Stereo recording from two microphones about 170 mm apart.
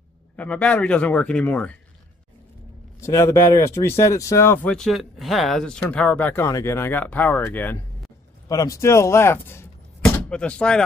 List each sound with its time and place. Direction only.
0.4 s speech: 5° left (ahead or behind)
3.0 s speech: 15° left (ahead or behind)
4.7 s speech: centre (ahead or behind)